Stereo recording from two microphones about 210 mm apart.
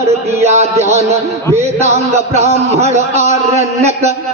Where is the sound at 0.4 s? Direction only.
30° right (ahead or behind).